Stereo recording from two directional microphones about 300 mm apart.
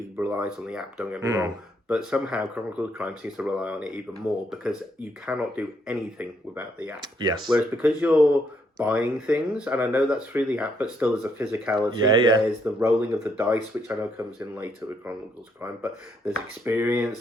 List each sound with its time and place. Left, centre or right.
0.2 s speech: centre
7.5 s speech: centre